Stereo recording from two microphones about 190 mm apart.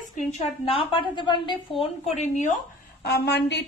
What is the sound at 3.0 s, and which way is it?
Speech, 60° left (ahead or behind).